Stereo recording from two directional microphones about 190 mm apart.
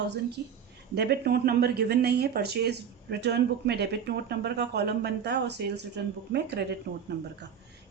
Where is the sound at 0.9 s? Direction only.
60° right (ahead or behind).